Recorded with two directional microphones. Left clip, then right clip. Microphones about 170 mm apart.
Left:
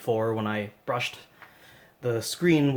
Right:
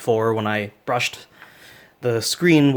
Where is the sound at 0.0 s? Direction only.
45° right (ahead or behind).